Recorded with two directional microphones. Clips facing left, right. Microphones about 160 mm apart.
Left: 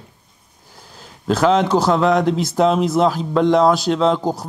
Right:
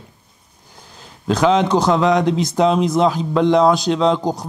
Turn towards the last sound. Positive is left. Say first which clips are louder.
# even
turn(degrees=5)  # may be behind; listen again after turning